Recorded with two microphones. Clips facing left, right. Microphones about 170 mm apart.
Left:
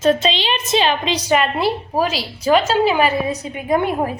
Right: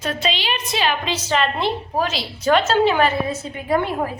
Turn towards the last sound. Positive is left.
turn(degrees=15)  # may be behind; listen again after turning